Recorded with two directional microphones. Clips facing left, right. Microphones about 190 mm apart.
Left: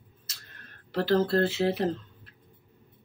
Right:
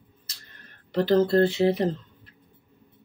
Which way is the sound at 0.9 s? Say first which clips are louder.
Right 4 dB; 5° left (ahead or behind).